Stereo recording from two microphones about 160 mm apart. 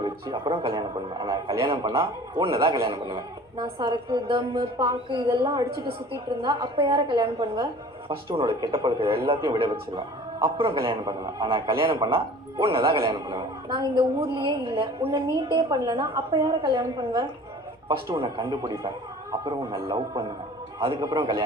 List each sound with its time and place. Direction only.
0.0 s a woman's voice: 30° right (ahead or behind)
12.7 s a woman's voice: 20° right (ahead or behind)